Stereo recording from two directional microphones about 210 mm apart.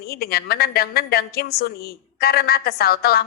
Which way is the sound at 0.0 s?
45° left (ahead or behind).